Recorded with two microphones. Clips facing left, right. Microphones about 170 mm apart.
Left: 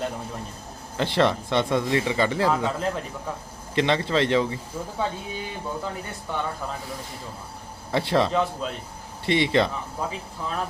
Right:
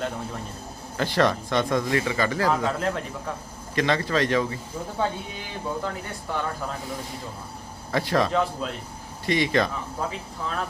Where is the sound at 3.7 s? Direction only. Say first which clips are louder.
Left 1 dB; 25° left (ahead or behind).